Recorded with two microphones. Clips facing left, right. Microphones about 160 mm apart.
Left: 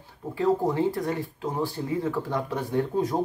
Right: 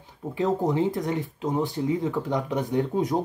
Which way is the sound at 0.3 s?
20° right (ahead or behind).